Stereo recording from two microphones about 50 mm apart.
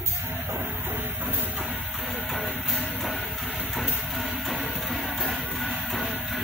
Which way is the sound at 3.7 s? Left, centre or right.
Centre.